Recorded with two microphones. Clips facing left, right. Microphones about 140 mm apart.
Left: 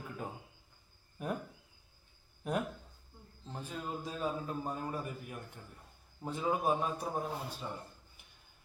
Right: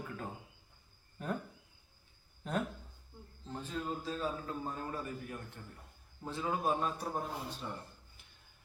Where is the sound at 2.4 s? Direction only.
10° left (ahead or behind).